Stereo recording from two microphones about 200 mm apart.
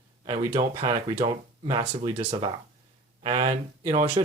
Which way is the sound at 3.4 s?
40° right (ahead or behind).